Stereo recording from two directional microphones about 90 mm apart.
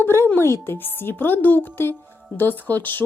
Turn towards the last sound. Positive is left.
turn(degrees=20)  # may be behind; listen again after turning